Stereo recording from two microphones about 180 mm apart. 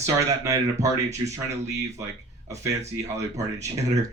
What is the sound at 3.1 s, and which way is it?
Speech, 15° right (ahead or behind).